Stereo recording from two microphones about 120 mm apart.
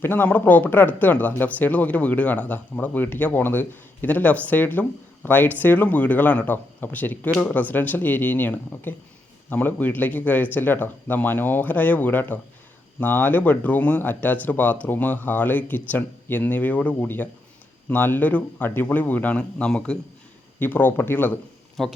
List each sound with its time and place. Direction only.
0.0 s speech: 15° left (ahead or behind)
21.8 s speech: centre (ahead or behind)